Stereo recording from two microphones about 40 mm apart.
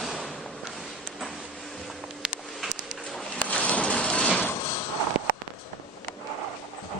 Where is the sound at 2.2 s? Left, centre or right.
Right.